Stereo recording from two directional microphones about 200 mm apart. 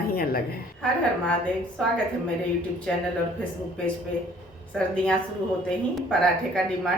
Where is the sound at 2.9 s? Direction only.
5° left (ahead or behind).